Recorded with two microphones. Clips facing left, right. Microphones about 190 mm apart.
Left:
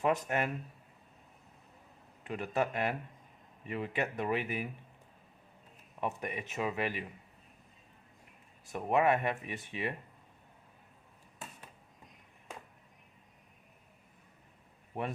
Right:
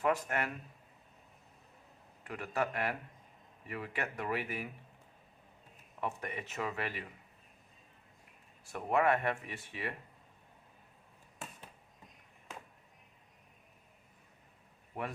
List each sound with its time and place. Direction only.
0.0 s speech: 20° left (ahead or behind)
2.2 s speech: 20° left (ahead or behind)
6.0 s speech: 15° left (ahead or behind)
8.6 s speech: 20° left (ahead or behind)
14.9 s speech: 25° left (ahead or behind)